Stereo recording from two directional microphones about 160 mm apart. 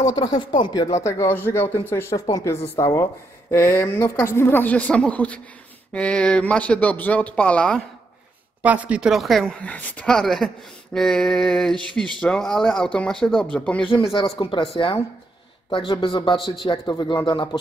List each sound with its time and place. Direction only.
0.0 s a woman's voice: 25° left (ahead or behind); by 7.8 s 5° left (ahead or behind)
8.6 s speech: 10° right (ahead or behind)
13.8 s speech: 30° left (ahead or behind)